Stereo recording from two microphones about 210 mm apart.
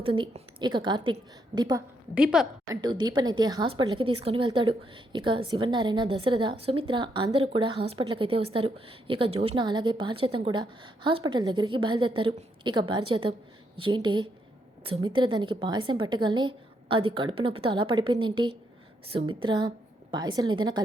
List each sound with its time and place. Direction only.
0.0 s a woman's voice: 25° right (ahead or behind)